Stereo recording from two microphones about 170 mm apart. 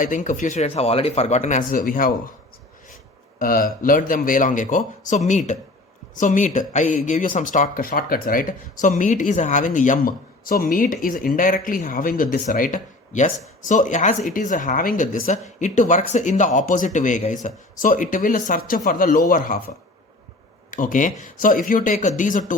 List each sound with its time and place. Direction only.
0.0 s speech: 50° left (ahead or behind)
3.3 s speech: 55° left (ahead or behind)